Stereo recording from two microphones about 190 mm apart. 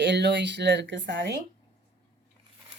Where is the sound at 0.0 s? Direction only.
65° right (ahead or behind).